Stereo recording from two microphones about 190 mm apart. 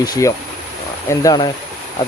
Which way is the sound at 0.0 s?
20° left (ahead or behind).